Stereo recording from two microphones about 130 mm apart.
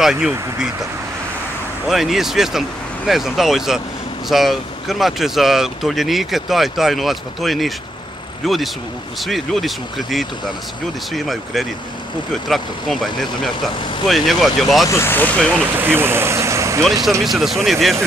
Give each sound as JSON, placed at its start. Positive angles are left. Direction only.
{"t": 0.0, "sound": "speech", "side_deg": -5}
{"t": 1.9, "sound": "speech", "side_deg": 0}
{"t": 14.9, "sound": "speech", "side_deg": 20}
{"t": 15.7, "sound": "speech", "side_deg": -15}
{"t": 17.2, "sound": "speech", "side_deg": 0}